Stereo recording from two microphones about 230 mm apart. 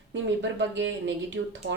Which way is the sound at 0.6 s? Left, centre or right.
Right.